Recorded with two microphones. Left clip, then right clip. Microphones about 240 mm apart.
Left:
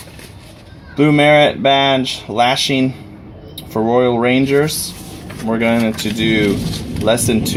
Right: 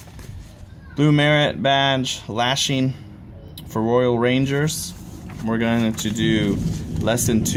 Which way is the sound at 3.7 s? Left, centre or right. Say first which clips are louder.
Left 5 dB; right.